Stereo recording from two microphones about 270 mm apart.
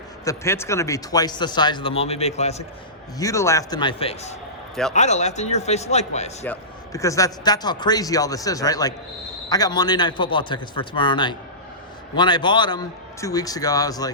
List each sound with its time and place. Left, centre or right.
0.3 s a man's voice: centre
3.2 s a man's voice: centre
4.7 s a man's voice: centre
4.9 s a man's voice: left
6.4 s a man's voice: centre